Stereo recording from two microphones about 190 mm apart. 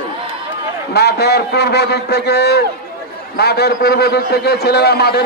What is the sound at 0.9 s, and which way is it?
A man's voice, 60° left (ahead or behind).